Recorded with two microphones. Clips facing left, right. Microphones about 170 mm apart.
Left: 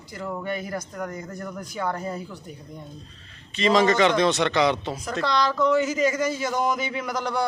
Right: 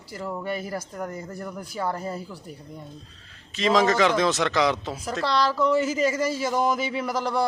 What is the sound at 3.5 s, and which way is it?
Speech, centre (ahead or behind).